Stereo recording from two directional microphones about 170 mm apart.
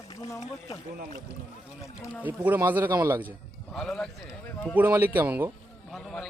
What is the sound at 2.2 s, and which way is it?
Speech, 10° right (ahead or behind).